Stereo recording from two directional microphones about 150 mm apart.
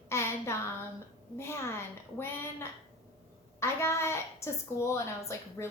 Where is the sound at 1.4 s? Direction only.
15° left (ahead or behind).